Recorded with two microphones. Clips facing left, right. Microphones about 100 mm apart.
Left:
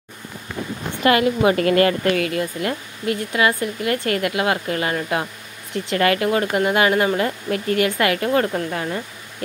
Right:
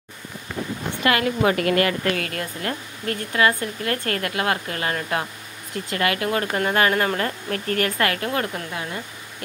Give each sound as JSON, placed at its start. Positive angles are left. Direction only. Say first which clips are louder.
{"t": 1.0, "sound": "speech", "louder": "left 4 dB", "side_deg": 25}
{"t": 2.3, "sound": "speech", "louder": "left 5 dB", "side_deg": 15}
{"t": 5.9, "sound": "speech", "louder": "left 5 dB", "side_deg": 30}
{"t": 6.2, "sound": "speech", "louder": "left 4 dB", "side_deg": 20}